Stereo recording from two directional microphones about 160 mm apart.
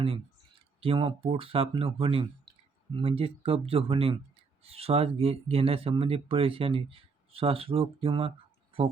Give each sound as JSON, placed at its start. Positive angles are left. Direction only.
{"t": 0.8, "sound": "speech", "side_deg": -35}